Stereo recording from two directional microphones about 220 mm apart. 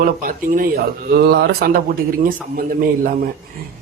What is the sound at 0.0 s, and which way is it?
Speech, 40° right (ahead or behind).